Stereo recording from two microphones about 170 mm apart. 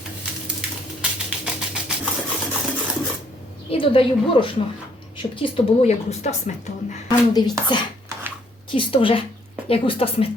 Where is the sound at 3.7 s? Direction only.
30° left (ahead or behind).